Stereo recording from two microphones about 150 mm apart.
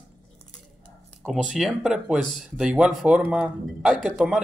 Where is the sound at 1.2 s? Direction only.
Centre (ahead or behind).